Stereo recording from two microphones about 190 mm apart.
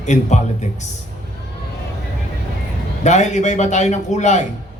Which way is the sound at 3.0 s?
40° left (ahead or behind).